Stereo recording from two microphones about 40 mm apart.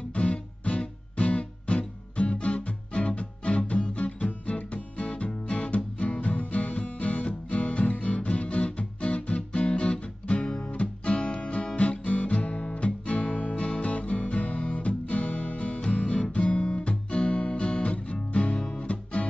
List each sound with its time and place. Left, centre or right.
0.1 s music: left
18.6 s guitar: left